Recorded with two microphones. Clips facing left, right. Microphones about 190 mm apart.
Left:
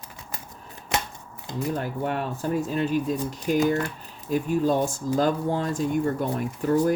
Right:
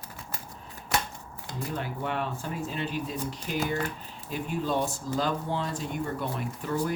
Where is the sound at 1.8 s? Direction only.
45° left (ahead or behind).